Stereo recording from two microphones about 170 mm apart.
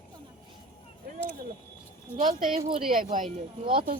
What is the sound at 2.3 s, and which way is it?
Speech, 55° right (ahead or behind).